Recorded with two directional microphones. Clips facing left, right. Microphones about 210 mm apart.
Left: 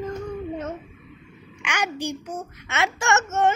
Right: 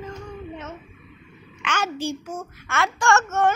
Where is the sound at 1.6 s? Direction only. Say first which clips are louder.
Right 1 dB; 15° left (ahead or behind).